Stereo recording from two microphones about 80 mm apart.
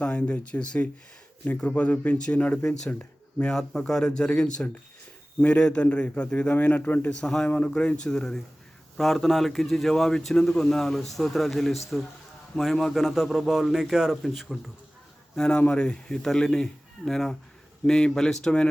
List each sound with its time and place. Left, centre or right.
0.0 s a man's voice: centre
7.3 s a man's voice: centre
15.4 s a man's voice: centre